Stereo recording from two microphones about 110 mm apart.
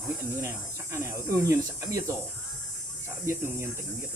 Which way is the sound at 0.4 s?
20° right (ahead or behind).